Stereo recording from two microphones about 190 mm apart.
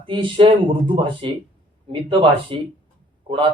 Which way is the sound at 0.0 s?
25° right (ahead or behind).